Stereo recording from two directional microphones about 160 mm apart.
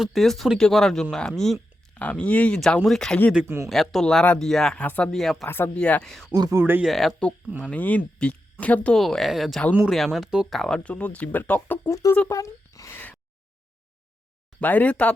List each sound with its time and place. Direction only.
0.0 s speech: centre (ahead or behind)
3.3 s speech: 15° right (ahead or behind)
3.7 s speech: centre (ahead or behind)
5.5 s speech: 15° left (ahead or behind)
6.3 s speech: 20° right (ahead or behind)
6.8 s speech: centre (ahead or behind); by 12.1 s 20° left (ahead or behind)
12.3 s a sound: 20° left (ahead or behind)
14.6 s speech: 10° left (ahead or behind)